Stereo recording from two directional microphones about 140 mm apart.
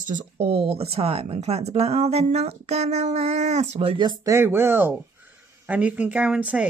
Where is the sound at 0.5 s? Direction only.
45° right (ahead or behind).